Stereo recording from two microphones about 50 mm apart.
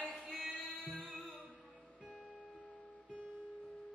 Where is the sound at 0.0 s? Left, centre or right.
Centre.